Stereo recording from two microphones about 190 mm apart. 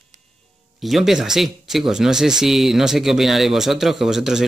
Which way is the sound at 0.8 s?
Centre (ahead or behind).